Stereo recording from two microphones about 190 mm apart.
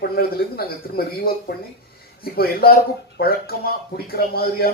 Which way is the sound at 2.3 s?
55° left (ahead or behind).